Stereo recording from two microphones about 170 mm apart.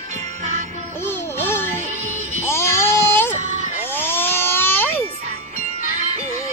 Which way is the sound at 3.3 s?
50° right (ahead or behind).